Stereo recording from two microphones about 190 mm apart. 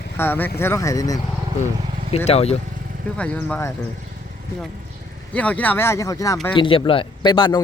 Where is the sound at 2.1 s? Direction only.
35° left (ahead or behind).